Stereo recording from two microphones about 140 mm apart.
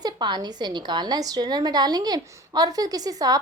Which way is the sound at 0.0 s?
30° right (ahead or behind).